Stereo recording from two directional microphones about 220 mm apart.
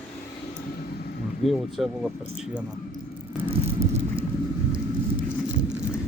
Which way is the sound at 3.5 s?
25° right (ahead or behind).